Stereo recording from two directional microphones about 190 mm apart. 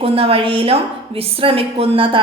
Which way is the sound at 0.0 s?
30° right (ahead or behind).